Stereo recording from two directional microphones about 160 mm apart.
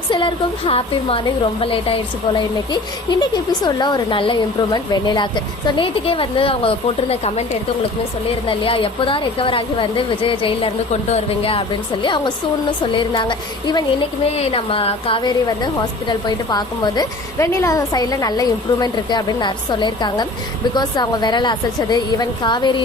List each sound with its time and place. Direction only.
0.1 s a woman's voice: 30° left (ahead or behind)
8.4 s a woman's voice: 35° left (ahead or behind)